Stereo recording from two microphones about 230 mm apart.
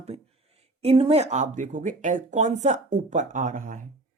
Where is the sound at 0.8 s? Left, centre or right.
Right.